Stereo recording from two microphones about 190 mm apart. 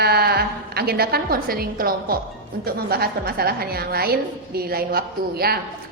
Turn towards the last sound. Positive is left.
turn(degrees=-55)  # may be behind; listen again after turning